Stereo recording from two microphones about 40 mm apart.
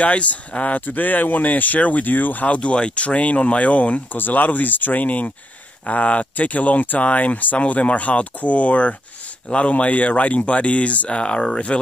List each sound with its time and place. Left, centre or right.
0.0 s speech: left
2.4 s speech: left